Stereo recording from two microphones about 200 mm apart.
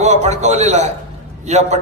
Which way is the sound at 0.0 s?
35° right (ahead or behind).